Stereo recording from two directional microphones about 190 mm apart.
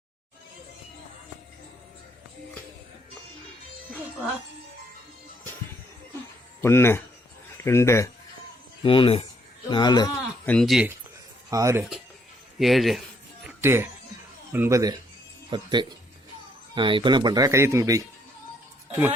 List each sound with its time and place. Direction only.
6.6 s speech: 15° left (ahead or behind)
8.8 s speech: 25° left (ahead or behind)
10.4 s speech: 5° left (ahead or behind)
11.5 s speech: 15° right (ahead or behind)
12.5 s a man's voice: centre (ahead or behind)
13.4 s music: 10° right (ahead or behind)
14.5 s speech: 15° right (ahead or behind)